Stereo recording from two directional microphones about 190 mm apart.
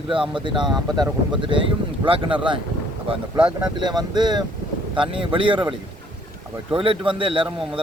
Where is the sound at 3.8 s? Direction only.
20° right (ahead or behind).